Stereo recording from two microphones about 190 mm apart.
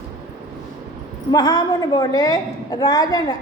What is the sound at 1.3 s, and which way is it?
A woman's voice, 20° left (ahead or behind).